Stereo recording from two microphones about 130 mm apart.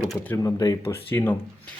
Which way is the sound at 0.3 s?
25° left (ahead or behind).